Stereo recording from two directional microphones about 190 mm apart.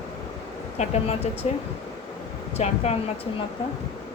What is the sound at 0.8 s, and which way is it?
Speech, 35° left (ahead or behind).